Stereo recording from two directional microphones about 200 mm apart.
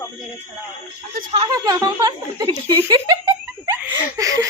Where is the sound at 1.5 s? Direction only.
20° right (ahead or behind).